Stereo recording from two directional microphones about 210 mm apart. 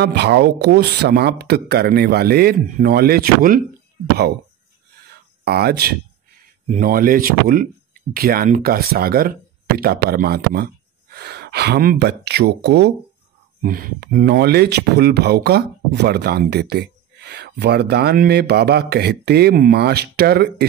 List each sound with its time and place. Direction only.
0.0 s speech: 55° right (ahead or behind)
5.4 s speech: 50° right (ahead or behind)